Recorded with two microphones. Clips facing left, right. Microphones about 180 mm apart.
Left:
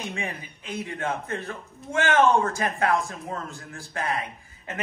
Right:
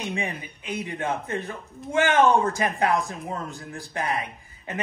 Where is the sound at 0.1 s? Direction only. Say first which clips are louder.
Right 3 dB; 15° right (ahead or behind).